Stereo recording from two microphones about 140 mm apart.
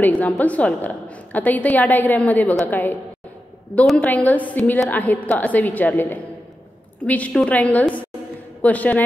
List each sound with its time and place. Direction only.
0.0 s a woman's voice: 10° left (ahead or behind)